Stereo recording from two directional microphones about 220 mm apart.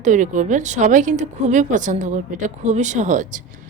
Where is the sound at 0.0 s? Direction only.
35° right (ahead or behind).